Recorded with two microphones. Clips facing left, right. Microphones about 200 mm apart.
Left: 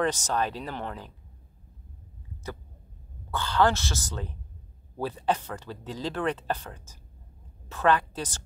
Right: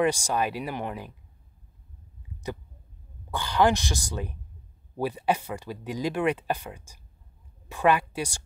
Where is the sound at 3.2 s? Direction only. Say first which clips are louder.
Right 1 dB; 15° right (ahead or behind).